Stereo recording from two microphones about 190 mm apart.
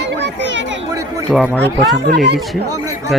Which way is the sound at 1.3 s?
Centre (ahead or behind).